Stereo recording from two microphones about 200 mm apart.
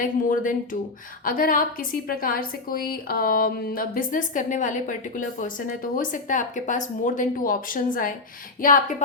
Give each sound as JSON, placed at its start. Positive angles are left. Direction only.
{"t": 0.0, "sound": "a woman's voice", "side_deg": 40}